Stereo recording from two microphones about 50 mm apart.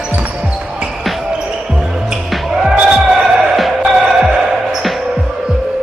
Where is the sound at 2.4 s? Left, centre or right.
Centre.